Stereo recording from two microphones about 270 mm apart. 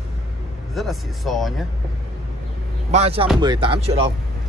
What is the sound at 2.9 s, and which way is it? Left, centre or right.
Speech, right.